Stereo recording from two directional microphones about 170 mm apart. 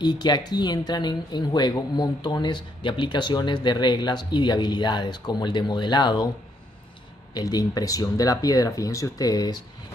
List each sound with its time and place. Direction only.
0.0 s speech: 25° left (ahead or behind)
7.3 s speech: 20° left (ahead or behind)